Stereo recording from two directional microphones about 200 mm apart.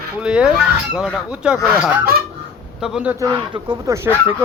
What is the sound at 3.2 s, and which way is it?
Speech, 15° right (ahead or behind).